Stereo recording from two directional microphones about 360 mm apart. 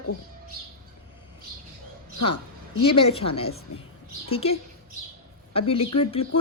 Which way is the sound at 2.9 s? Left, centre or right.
Centre.